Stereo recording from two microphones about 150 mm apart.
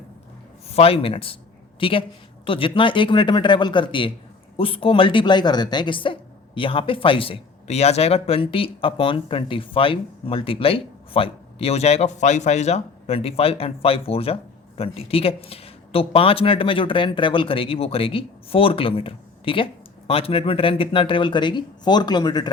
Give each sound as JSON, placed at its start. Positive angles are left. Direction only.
{"t": 0.7, "sound": "speech", "side_deg": 40}